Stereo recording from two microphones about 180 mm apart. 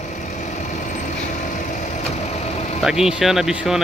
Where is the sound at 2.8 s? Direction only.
5° right (ahead or behind).